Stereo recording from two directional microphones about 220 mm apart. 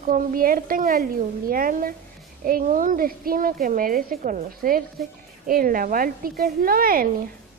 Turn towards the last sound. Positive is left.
turn(degrees=-40)  # may be behind; listen again after turning